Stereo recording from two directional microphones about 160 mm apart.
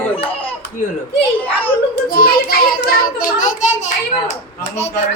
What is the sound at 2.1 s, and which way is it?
A child's voice, 70° left (ahead or behind).